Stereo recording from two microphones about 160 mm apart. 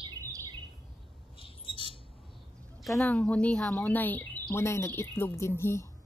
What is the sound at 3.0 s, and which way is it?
Speech, 5° left (ahead or behind).